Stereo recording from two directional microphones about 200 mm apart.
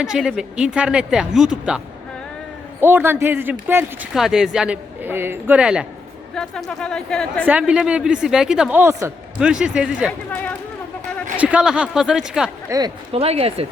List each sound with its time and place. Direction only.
0.0 s speech: 5° right (ahead or behind)
2.8 s a man's voice: 10° right (ahead or behind)
7.4 s speech: 5° right (ahead or behind)
11.3 s speech: 5° right (ahead or behind)
12.7 s speech: 25° right (ahead or behind)